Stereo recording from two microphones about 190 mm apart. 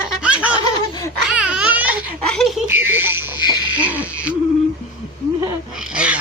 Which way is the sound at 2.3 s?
Centre (ahead or behind).